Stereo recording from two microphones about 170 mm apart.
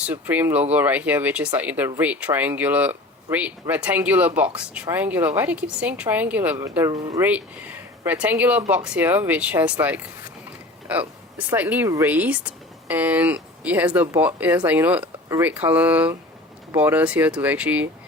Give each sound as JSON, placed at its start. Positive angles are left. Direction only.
{"t": 0.0, "sound": "speech", "side_deg": -10}
{"t": 7.3, "sound": "speech", "side_deg": -10}
{"t": 10.8, "sound": "speech", "side_deg": -10}